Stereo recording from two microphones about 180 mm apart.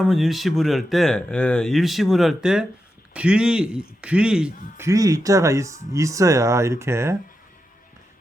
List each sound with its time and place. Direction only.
0.0 s speech: centre (ahead or behind)
4.9 s speech: 20° right (ahead or behind)